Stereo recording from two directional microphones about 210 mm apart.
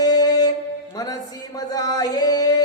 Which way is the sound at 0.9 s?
15° left (ahead or behind).